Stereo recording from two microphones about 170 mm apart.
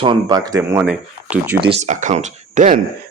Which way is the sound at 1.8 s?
45° right (ahead or behind).